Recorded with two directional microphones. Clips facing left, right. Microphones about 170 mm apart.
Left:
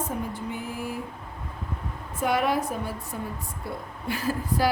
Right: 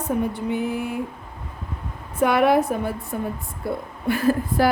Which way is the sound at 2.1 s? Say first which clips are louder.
Right 7 dB; 60° right (ahead or behind).